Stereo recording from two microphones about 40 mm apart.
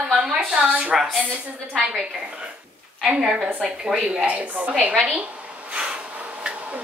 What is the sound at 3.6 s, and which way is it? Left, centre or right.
Speech, centre.